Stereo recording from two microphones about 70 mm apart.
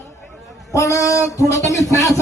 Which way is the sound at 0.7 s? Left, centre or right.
Left.